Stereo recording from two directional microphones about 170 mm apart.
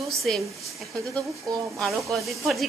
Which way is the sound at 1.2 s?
20° right (ahead or behind).